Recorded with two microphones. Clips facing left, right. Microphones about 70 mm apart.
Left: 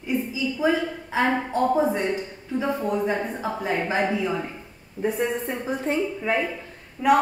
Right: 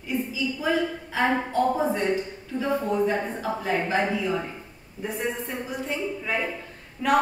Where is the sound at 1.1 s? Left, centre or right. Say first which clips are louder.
Left 1 dB; left.